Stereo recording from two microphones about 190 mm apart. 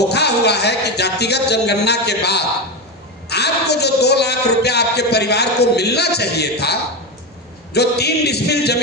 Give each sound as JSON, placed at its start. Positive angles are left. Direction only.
{"t": 0.1, "sound": "a man's voice", "side_deg": 60}